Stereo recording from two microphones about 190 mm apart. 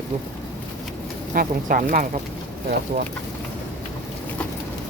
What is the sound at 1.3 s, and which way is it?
Speech, 45° right (ahead or behind).